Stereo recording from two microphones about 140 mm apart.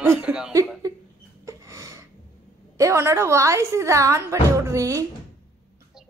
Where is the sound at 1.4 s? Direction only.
20° right (ahead or behind).